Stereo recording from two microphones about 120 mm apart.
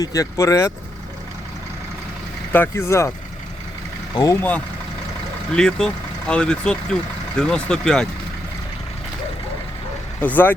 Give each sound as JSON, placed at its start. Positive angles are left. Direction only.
{"t": 0.0, "sound": "speech", "side_deg": 30}
{"t": 2.5, "sound": "speech", "side_deg": 20}
{"t": 4.1, "sound": "speech", "side_deg": 30}
{"t": 4.4, "sound": "speech", "side_deg": 15}
{"t": 10.2, "sound": "speech", "side_deg": 15}